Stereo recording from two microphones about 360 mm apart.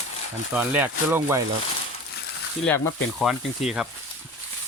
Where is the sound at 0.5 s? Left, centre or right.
Centre.